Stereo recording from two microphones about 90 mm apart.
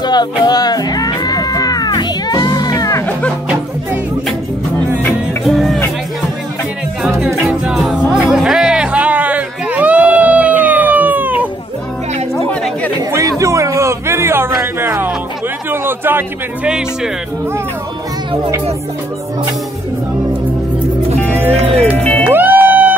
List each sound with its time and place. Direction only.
0.0 s music: 50° left (ahead or behind)
3.1 s music: 15° left (ahead or behind)
5.4 s music: centre (ahead or behind)
7.0 s music: 5° right (ahead or behind)
13.1 s a sound: 35° right (ahead or behind)
16.6 s speech: 10° right (ahead or behind)
21.4 s speech: 20° right (ahead or behind)
21.9 s music: 15° left (ahead or behind)
22.3 s music: 20° right (ahead or behind)